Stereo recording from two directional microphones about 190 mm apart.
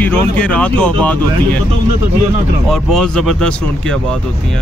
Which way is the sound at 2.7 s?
5° left (ahead or behind).